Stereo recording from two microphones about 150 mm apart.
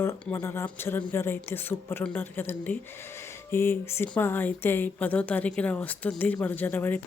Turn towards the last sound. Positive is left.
turn(degrees=10)  # may be behind; listen again after turning